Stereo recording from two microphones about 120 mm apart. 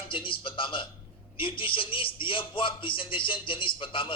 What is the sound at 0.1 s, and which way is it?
A man's voice, 45° left (ahead or behind).